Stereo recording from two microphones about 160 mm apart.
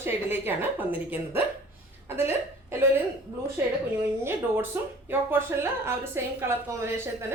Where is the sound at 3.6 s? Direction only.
15° right (ahead or behind).